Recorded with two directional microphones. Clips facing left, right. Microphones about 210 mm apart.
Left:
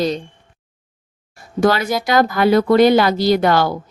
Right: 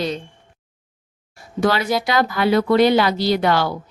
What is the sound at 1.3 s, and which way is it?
Speech, 45° left (ahead or behind).